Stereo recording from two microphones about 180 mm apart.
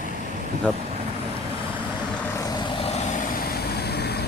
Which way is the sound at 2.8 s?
40° left (ahead or behind).